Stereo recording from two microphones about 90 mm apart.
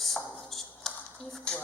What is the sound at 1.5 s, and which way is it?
Speech, 10° left (ahead or behind).